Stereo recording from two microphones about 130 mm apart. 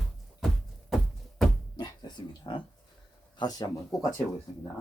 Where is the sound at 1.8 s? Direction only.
35° left (ahead or behind).